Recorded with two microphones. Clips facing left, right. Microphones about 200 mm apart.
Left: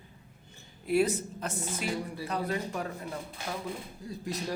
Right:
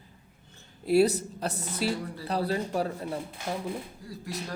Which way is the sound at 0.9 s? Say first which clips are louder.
Right 4 dB; 40° right (ahead or behind).